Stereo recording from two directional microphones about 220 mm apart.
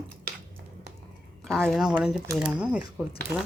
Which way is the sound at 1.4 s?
Centre (ahead or behind).